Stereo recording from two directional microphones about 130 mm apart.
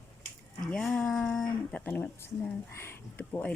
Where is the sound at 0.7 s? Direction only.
10° left (ahead or behind).